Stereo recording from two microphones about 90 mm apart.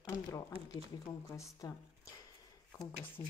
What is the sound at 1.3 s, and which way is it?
Speech, 40° left (ahead or behind).